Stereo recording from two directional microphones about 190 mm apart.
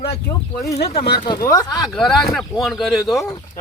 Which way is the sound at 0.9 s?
55° left (ahead or behind).